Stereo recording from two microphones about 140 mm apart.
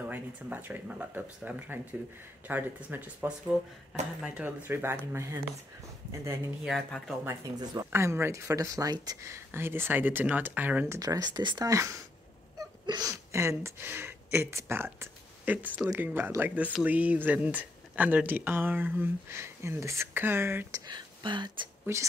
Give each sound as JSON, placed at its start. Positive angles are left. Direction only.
{"t": 0.1, "sound": "speech", "side_deg": -10}
{"t": 6.6, "sound": "speech", "side_deg": 0}
{"t": 7.2, "sound": "speech", "side_deg": -25}
{"t": 11.0, "sound": "speech", "side_deg": -25}
{"t": 20.8, "sound": "speech", "side_deg": -35}
{"t": 21.9, "sound": "speech", "side_deg": -15}